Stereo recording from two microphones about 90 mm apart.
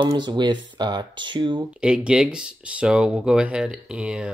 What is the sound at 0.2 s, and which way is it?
Speech, 55° right (ahead or behind).